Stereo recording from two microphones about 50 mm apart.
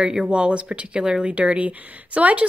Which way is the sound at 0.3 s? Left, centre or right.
Right.